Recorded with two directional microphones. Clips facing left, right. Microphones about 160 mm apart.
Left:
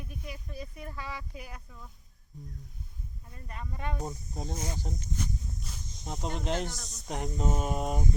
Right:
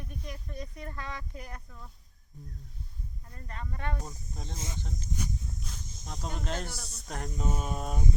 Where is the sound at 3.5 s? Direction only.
10° left (ahead or behind).